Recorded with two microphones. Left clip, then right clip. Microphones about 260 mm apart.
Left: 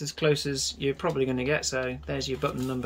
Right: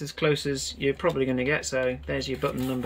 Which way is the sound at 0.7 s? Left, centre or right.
Centre.